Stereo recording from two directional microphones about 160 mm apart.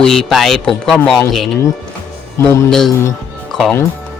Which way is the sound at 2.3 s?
15° left (ahead or behind).